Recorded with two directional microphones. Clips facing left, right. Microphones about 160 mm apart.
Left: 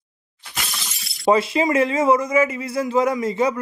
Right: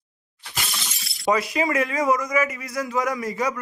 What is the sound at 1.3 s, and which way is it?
A man's voice, 25° left (ahead or behind).